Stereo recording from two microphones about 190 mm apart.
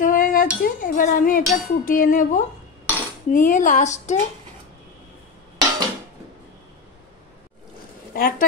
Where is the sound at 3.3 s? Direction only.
45° left (ahead or behind).